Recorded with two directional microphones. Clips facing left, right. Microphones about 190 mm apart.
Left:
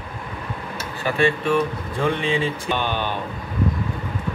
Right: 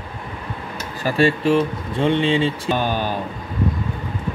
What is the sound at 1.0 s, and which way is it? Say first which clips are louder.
Speech: right 3 dB; 35° right (ahead or behind).